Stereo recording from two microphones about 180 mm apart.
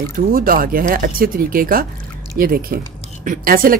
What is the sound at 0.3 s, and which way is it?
Speech, 55° right (ahead or behind).